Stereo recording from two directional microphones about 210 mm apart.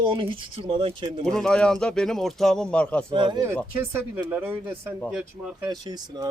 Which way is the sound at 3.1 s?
20° right (ahead or behind).